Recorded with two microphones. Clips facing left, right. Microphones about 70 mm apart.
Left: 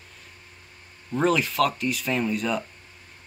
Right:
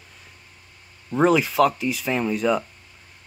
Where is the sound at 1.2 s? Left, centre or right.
Centre.